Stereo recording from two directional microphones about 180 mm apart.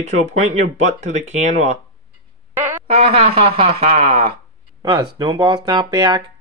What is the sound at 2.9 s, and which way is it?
Speech, 35° right (ahead or behind).